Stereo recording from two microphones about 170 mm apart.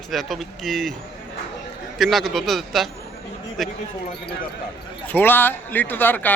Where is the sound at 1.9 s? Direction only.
Centre (ahead or behind).